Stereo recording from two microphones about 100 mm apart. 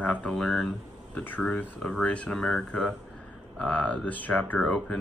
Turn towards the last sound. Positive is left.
turn(degrees=10)  # may be behind; listen again after turning